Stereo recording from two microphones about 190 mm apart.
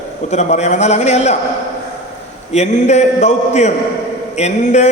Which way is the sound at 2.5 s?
35° left (ahead or behind).